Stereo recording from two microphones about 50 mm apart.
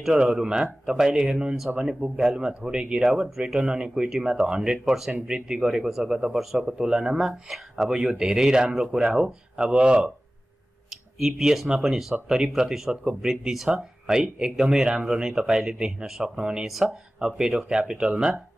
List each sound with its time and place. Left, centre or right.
0.0 s speech: centre
10.9 s speech: centre